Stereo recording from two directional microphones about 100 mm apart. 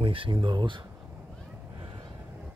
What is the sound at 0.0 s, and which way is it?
Speech, 60° right (ahead or behind).